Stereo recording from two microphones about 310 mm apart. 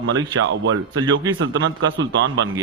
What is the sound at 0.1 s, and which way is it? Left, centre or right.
A man's voice, right.